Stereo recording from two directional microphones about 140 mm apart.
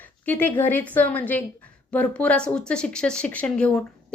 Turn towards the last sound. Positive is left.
turn(degrees=10)  # may be behind; listen again after turning